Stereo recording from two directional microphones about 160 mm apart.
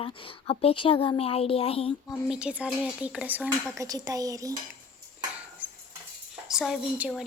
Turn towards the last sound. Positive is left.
turn(degrees=0)  # may be behind; listen again after turning